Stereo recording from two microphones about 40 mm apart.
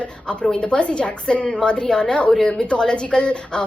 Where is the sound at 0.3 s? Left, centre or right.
Left.